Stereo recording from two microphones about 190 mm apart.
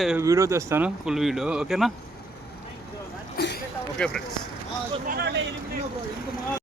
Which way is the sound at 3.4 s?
55° left (ahead or behind).